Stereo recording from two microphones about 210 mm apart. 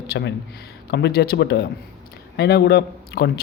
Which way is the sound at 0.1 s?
55° left (ahead or behind).